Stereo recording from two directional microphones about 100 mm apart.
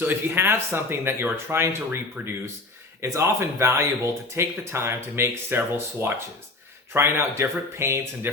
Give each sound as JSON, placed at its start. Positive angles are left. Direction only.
{"t": 0.0, "sound": "speech", "side_deg": -20}